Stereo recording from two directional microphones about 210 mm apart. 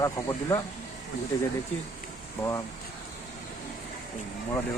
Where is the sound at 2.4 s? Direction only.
15° left (ahead or behind).